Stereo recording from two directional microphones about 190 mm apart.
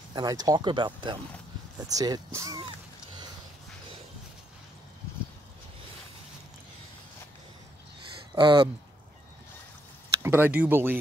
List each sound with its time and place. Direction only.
0.1 s speech: 20° right (ahead or behind)
8.4 s speech: 25° right (ahead or behind)
10.2 s speech: 10° right (ahead or behind)